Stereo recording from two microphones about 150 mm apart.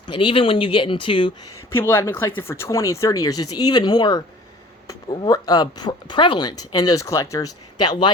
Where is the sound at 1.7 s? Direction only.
15° left (ahead or behind); by 8.1 s 30° left (ahead or behind).